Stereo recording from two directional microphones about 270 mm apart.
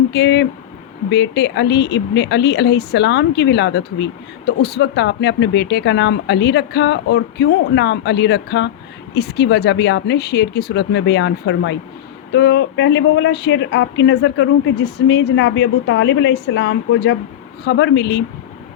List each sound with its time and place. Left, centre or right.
0.1 s speech: left